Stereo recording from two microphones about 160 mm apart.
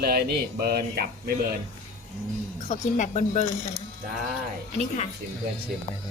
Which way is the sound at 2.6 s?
50° left (ahead or behind).